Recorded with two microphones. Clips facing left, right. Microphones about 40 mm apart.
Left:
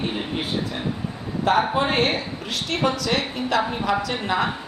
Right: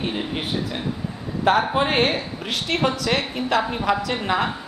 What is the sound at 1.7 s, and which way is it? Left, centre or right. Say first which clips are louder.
A man's voice: right 1 dB; centre.